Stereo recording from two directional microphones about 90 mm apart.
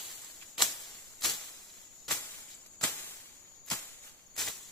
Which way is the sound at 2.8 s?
25° left (ahead or behind).